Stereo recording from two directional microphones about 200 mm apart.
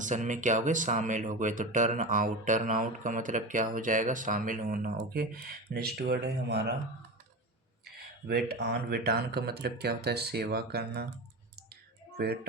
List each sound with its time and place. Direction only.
0.0 s speech: 40° right (ahead or behind); by 6.7 s 55° right (ahead or behind)
7.9 s speech: 55° right (ahead or behind)
11.5 s clicking: 55° right (ahead or behind)